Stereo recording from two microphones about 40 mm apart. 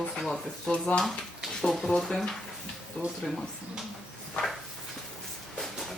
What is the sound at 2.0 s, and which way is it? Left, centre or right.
Speech, centre.